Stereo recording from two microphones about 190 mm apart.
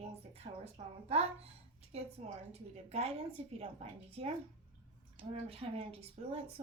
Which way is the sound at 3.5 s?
30° right (ahead or behind).